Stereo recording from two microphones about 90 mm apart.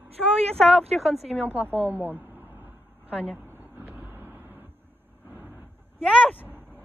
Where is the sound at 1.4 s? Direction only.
20° right (ahead or behind).